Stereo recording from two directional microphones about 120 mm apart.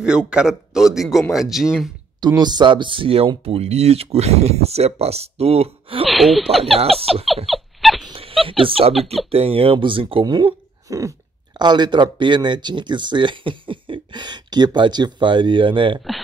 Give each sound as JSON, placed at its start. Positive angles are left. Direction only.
{"t": 0.0, "sound": "speech", "side_deg": -5}
{"t": 2.1, "sound": "speech", "side_deg": -35}
{"t": 6.0, "sound": "speech", "side_deg": 0}
{"t": 6.8, "sound": "speech", "side_deg": -55}
{"t": 7.4, "sound": "a sound", "side_deg": 0}
{"t": 8.1, "sound": "a sound", "side_deg": -50}
{"t": 9.3, "sound": "speech", "side_deg": -50}
{"t": 11.5, "sound": "speech", "side_deg": -40}